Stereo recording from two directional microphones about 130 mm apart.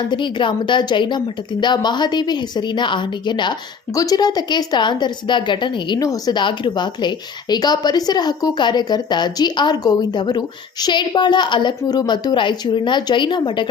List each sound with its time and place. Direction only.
0.1 s a woman's voice: 40° left (ahead or behind)